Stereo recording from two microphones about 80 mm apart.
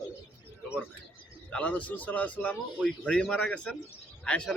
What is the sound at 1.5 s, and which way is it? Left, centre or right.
A man's voice, centre.